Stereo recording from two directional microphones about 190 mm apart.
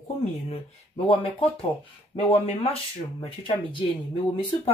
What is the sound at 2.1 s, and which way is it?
Speech, 30° left (ahead or behind).